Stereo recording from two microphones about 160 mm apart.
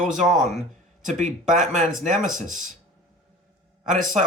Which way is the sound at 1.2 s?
50° right (ahead or behind).